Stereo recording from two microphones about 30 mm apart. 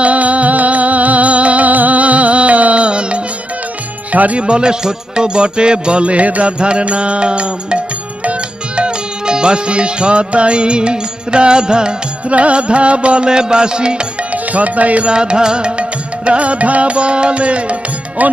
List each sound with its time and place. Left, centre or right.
0.0 s music: right
4.1 s speech: right
4.4 s music: right
6.4 s music: right
8.8 s music: right
12.3 s music: right
14.3 s music: right
15.0 s music: right